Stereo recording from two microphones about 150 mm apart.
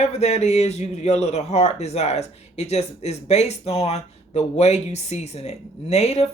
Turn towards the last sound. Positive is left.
turn(degrees=45)  # may be behind; listen again after turning